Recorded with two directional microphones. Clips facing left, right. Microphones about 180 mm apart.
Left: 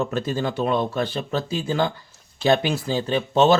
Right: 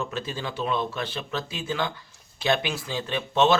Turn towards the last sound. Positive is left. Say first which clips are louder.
# left 4 dB
turn(degrees=35)  # may be behind; listen again after turning